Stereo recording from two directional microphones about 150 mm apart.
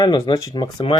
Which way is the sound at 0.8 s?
40° left (ahead or behind).